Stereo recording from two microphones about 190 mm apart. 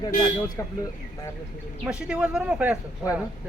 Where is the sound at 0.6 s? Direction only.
15° left (ahead or behind).